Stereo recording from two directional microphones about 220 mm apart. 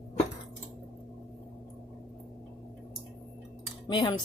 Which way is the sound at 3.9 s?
20° left (ahead or behind).